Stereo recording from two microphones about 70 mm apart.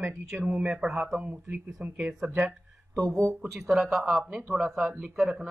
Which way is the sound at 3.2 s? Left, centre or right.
Centre.